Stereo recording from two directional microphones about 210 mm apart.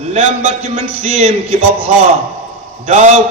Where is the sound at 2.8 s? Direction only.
35° right (ahead or behind).